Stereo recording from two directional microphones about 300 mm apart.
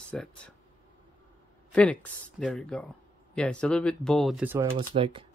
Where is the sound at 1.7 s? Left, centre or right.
Centre.